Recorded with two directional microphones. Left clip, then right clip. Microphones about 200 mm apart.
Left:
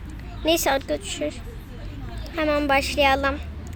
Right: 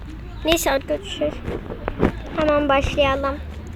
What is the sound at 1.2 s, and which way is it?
A woman's voice, 10° left (ahead or behind).